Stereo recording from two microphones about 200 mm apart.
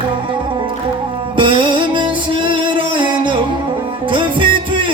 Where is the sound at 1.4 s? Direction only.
25° right (ahead or behind).